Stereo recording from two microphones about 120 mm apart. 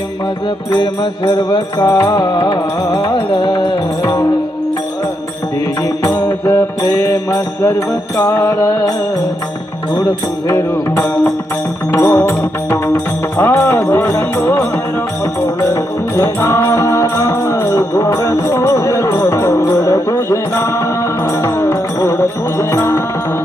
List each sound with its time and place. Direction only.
1.2 s music: 30° left (ahead or behind)
4.0 s music: 25° left (ahead or behind)
6.0 s music: 30° left (ahead or behind)
10.5 s music: 20° left (ahead or behind)
15.7 s music: 25° left (ahead or behind)